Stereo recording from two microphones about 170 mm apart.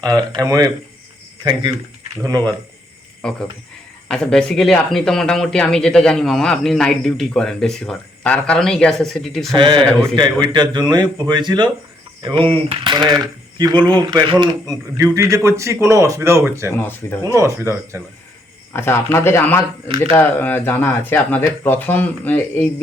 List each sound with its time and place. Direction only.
0.0 s speech: 20° right (ahead or behind)
2.2 s speech: 25° right (ahead or behind)
3.2 s speech: 5° left (ahead or behind)
9.6 s speech: 30° right (ahead or behind)
16.7 s speech: 15° left (ahead or behind)
17.3 s speech: 15° right (ahead or behind)
18.7 s speech: 15° left (ahead or behind)